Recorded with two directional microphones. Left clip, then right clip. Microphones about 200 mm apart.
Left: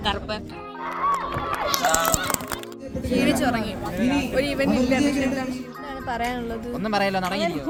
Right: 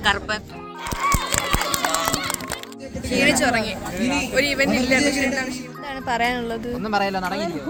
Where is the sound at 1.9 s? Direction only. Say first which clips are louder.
Left 1 dB; 50° left (ahead or behind).